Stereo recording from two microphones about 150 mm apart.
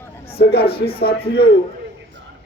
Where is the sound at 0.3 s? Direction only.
90° left.